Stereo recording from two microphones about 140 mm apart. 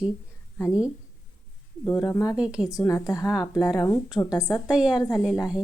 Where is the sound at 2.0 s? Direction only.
25° left (ahead or behind).